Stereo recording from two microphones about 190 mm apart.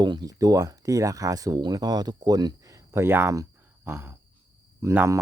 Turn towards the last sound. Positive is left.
turn(degrees=-15)  # may be behind; listen again after turning